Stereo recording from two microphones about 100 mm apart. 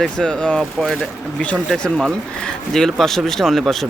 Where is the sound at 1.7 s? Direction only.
5° left (ahead or behind).